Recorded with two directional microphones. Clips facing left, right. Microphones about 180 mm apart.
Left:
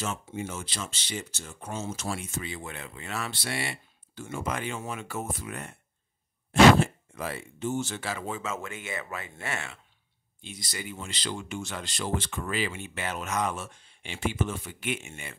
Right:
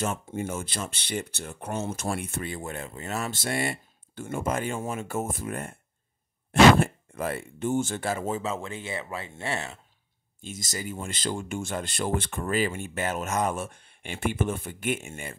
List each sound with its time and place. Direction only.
0.0 s speech: 50° right (ahead or behind); by 9.8 s 35° right (ahead or behind)
10.4 s speech: 45° right (ahead or behind)